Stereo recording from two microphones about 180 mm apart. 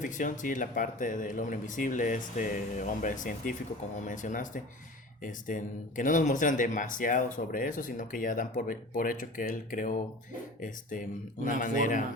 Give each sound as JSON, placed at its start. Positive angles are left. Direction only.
{"t": 0.0, "sound": "speech", "side_deg": 45}
{"t": 11.4, "sound": "speech", "side_deg": 45}